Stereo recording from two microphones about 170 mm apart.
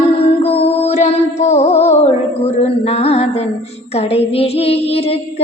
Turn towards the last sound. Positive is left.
turn(degrees=35)  # may be behind; listen again after turning